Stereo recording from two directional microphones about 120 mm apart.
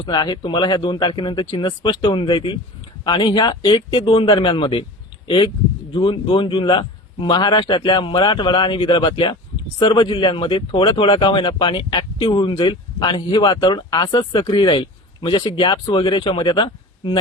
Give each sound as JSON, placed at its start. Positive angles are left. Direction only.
{"t": 0.0, "sound": "a man's voice", "side_deg": 35}
{"t": 5.9, "sound": "a man's voice", "side_deg": 45}